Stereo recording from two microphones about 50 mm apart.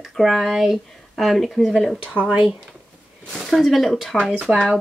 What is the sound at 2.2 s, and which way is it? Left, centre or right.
Speech, right.